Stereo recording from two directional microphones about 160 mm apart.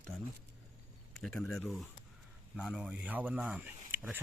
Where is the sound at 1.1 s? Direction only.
5° left (ahead or behind).